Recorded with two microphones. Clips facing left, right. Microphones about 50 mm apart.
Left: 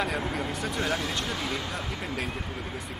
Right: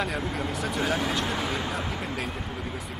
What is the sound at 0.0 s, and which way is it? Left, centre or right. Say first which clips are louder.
Speech: even; centre.